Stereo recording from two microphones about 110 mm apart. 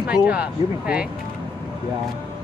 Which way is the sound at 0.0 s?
10° right (ahead or behind).